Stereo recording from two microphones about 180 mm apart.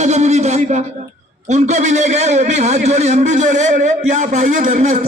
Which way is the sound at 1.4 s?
40° right (ahead or behind).